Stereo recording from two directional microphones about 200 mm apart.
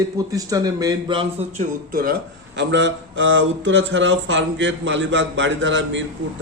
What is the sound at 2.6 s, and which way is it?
A man's voice, 65° right (ahead or behind).